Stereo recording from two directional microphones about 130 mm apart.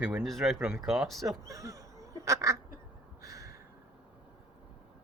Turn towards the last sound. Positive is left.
turn(degrees=-25)  # may be behind; listen again after turning